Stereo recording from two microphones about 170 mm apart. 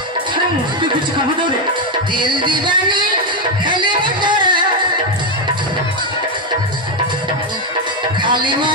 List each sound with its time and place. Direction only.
2.1 s speech: 25° right (ahead or behind)
8.2 s music: 30° right (ahead or behind)